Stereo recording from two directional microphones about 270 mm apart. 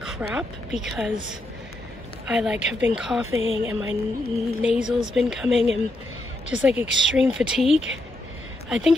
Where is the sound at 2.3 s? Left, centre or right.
Centre.